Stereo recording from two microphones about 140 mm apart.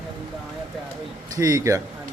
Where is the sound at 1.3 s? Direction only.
25° right (ahead or behind).